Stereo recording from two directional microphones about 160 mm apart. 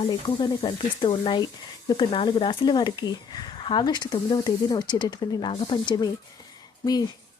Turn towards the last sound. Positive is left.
turn(degrees=25)  # may be behind; listen again after turning